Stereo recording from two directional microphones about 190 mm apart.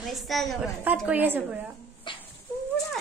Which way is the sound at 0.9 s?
5° right (ahead or behind).